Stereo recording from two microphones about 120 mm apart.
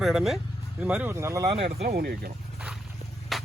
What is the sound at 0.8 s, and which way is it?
Speech, 15° right (ahead or behind).